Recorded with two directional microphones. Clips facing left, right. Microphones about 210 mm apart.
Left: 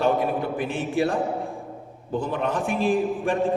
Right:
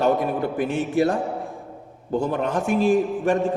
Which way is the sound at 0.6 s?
45° right (ahead or behind).